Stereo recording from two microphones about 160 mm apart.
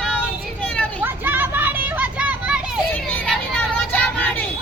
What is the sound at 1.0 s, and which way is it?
Children playing, 15° right (ahead or behind).